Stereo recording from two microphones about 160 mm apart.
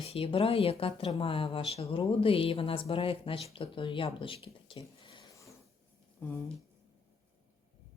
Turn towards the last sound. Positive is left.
turn(degrees=15)  # may be behind; listen again after turning